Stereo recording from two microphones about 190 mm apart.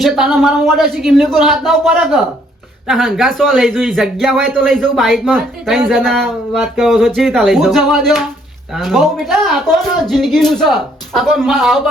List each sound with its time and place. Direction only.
0.0 s speech: centre (ahead or behind)